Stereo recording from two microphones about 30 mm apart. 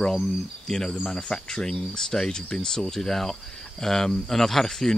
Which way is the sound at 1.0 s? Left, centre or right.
Left.